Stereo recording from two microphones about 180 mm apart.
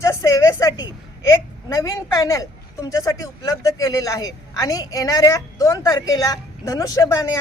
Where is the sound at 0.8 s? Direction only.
15° left (ahead or behind).